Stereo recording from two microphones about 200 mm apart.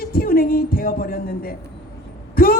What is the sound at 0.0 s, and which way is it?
A man's voice, 45° left (ahead or behind).